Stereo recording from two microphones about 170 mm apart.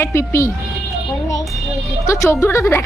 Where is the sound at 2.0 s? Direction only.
15° left (ahead or behind).